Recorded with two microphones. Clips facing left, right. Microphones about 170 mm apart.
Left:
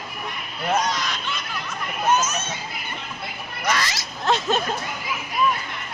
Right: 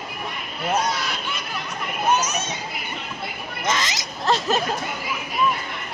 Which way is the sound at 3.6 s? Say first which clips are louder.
Even; 20° right (ahead or behind).